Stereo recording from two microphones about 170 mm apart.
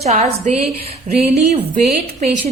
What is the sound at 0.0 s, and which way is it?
A woman's voice, 40° right (ahead or behind).